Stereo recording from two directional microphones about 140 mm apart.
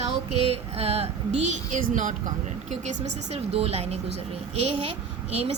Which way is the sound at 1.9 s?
70° right (ahead or behind).